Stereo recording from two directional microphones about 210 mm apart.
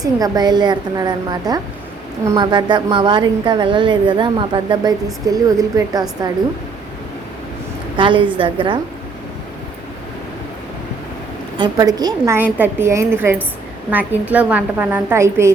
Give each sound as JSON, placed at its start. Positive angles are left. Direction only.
{"t": 0.0, "sound": "a woman's voice", "side_deg": -20}
{"t": 7.9, "sound": "a woman's voice", "side_deg": -25}
{"t": 11.5, "sound": "a woman's voice", "side_deg": -20}